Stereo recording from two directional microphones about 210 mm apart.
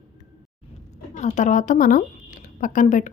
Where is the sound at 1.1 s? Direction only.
35° left (ahead or behind).